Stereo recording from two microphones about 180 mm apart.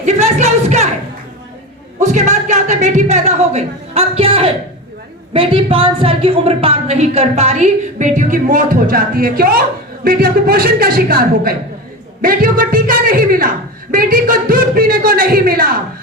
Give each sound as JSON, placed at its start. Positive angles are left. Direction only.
{"t": 0.0, "sound": "music", "side_deg": -40}
{"t": 2.0, "sound": "a sound", "side_deg": -40}
{"t": 5.3, "sound": "a woman's voice", "side_deg": -30}